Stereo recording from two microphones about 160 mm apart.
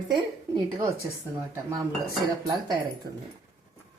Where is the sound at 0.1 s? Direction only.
30° right (ahead or behind).